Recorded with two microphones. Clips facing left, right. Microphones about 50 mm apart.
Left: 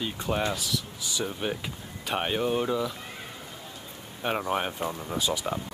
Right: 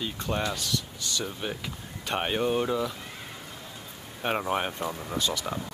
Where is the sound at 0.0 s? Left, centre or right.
Centre.